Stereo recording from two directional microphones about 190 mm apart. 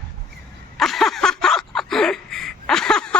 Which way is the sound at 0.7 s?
Centre (ahead or behind).